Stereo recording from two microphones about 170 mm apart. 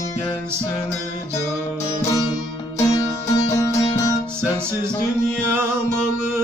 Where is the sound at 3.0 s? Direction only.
20° left (ahead or behind).